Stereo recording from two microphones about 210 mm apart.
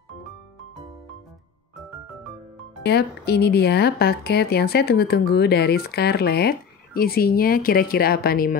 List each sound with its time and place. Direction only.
2.8 s speech: 50° left (ahead or behind)